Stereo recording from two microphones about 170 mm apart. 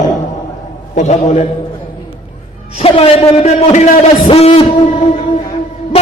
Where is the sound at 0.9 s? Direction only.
45° left (ahead or behind).